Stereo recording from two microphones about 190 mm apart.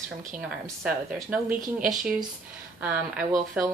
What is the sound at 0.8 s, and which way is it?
Speech, 10° right (ahead or behind).